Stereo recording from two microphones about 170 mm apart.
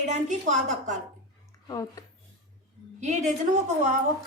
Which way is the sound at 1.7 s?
20° left (ahead or behind).